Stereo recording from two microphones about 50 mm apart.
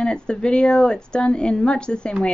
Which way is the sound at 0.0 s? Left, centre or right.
Centre.